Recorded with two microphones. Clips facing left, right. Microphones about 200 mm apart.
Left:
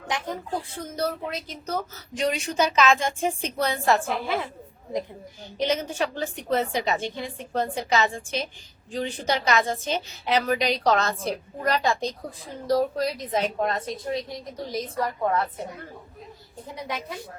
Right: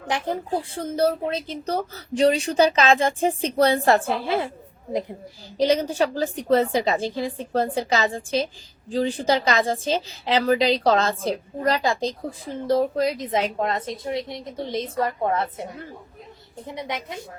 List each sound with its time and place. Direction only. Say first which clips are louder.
0.3 s speech: right 5 dB; 30° right (ahead or behind)
5.5 s a woman's voice: right 5 dB; 35° right (ahead or behind)
11.9 s a woman's voice: right 2 dB; 90° right
12.5 s a woman's voice: right 2 dB; 25° right (ahead or behind)